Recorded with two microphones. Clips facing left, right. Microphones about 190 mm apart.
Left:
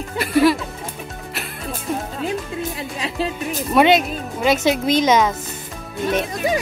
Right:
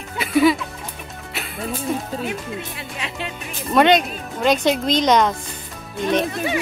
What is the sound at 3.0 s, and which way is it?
Music, 35° left (ahead or behind).